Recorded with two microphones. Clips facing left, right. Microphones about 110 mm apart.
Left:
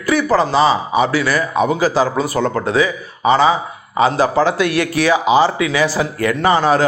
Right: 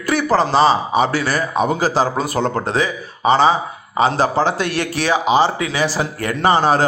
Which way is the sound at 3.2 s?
25° right (ahead or behind).